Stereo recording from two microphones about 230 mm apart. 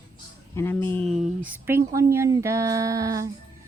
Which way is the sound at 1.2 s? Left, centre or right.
Centre.